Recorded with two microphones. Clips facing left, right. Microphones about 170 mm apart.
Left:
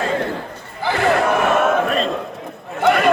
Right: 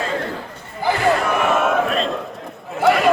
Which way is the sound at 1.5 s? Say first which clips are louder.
Left 1 dB; centre (ahead or behind).